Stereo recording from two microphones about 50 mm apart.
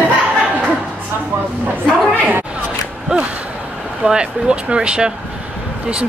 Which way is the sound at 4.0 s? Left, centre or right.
Centre.